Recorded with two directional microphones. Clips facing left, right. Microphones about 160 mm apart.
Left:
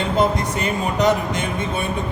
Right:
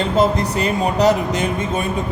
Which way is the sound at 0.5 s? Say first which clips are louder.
Right 3 dB; 35° right (ahead or behind).